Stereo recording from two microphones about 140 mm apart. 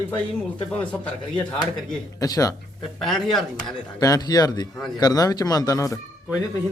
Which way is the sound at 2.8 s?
5° left (ahead or behind).